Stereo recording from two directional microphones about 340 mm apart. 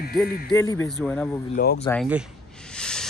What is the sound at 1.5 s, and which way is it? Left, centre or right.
Speech, left.